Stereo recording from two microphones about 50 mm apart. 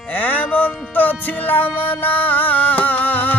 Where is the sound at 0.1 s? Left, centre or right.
Left.